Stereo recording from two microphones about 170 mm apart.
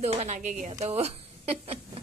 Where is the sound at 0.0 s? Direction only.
40° right (ahead or behind).